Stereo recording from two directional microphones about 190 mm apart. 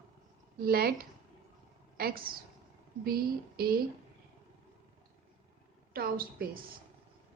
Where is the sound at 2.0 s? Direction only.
50° right (ahead or behind).